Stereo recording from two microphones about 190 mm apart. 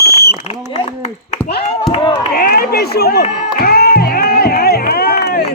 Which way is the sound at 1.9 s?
25° left (ahead or behind).